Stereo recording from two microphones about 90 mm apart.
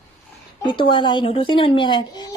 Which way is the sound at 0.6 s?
65° left (ahead or behind).